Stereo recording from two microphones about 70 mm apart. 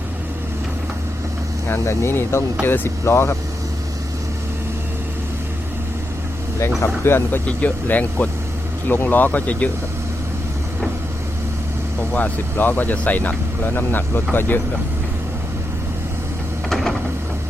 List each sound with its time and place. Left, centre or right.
1.6 s speech: left
6.8 s speech: left
7.4 s speech: left
12.1 s speech: left
16.6 s a sound: centre